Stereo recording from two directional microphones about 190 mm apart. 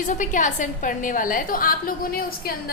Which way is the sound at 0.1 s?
40° left (ahead or behind).